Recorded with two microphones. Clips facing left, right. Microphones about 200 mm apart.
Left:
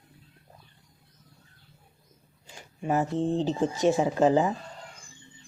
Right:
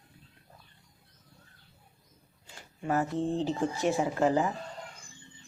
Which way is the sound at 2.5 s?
15° left (ahead or behind).